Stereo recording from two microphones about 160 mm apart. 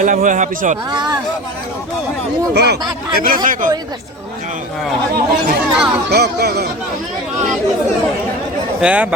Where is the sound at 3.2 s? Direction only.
60° right (ahead or behind).